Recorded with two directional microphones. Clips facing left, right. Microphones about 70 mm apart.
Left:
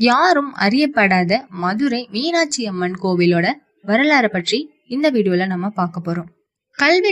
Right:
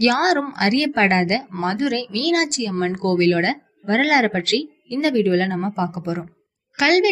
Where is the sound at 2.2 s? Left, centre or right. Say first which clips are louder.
Left 1 dB; centre.